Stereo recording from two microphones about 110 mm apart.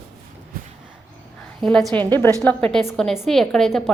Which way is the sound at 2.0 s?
20° left (ahead or behind).